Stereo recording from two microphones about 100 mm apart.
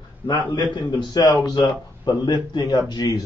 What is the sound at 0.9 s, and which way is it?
A man's voice, 45° left (ahead or behind).